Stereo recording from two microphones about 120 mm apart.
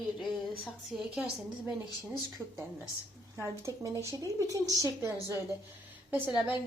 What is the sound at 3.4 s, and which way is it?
A woman's voice, 25° right (ahead or behind).